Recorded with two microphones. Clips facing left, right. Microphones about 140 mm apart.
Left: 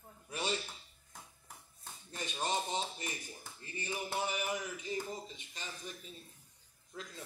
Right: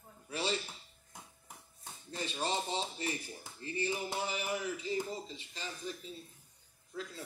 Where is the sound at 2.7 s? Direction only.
35° right (ahead or behind).